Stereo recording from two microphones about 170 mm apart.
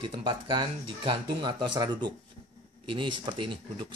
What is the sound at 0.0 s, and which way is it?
Speech, 30° right (ahead or behind).